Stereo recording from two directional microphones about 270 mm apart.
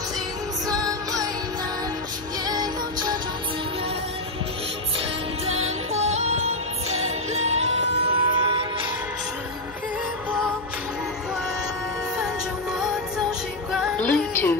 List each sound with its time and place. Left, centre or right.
2.4 s music: centre
5.5 s music: right
6.0 s music: right
6.9 s music: right
7.4 s music: right
12.7 s music: centre